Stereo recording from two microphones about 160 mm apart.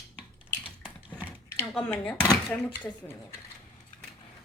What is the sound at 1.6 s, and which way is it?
Speech, 15° left (ahead or behind).